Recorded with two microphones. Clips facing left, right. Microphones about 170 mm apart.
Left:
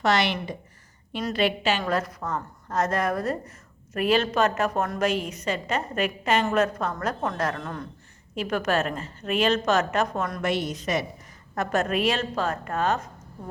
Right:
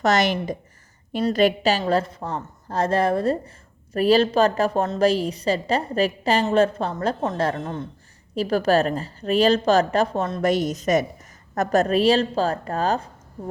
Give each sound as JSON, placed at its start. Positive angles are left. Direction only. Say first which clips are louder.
{"t": 0.0, "sound": "a woman's voice", "louder": "right 3 dB", "side_deg": -45}
{"t": 1.8, "sound": "a woman's voice", "louder": "right 5 dB", "side_deg": -30}
{"t": 10.4, "sound": "a woman's voice", "louder": "right 7 dB", "side_deg": -40}